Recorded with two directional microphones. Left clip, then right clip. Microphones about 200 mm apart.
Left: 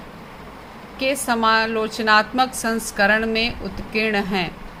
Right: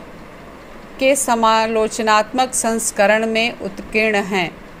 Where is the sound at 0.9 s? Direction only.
20° right (ahead or behind).